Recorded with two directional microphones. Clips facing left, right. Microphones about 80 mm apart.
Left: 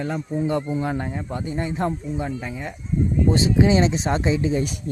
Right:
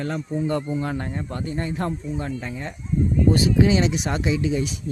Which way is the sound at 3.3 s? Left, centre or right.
Left.